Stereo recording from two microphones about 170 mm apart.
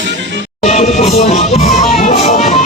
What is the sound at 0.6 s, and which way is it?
Music, 40° left (ahead or behind).